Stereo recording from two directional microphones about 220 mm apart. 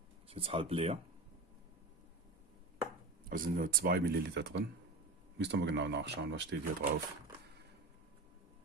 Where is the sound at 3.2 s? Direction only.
40° right (ahead or behind).